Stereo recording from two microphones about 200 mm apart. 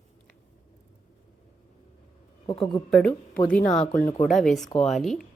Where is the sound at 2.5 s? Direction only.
25° left (ahead or behind).